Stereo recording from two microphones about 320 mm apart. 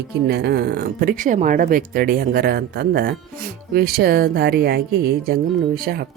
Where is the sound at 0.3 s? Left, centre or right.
Right.